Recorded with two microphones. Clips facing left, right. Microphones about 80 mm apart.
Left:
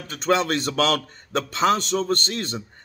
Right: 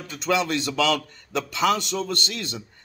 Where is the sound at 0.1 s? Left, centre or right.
Left.